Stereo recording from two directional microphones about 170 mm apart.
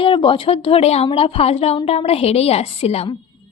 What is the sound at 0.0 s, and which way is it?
A woman's voice, 30° left (ahead or behind).